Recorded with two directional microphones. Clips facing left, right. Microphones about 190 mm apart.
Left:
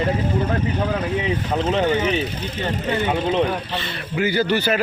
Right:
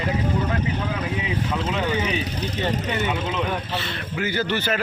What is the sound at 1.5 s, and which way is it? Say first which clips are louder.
Speech: left 7 dB; 35° left (ahead or behind).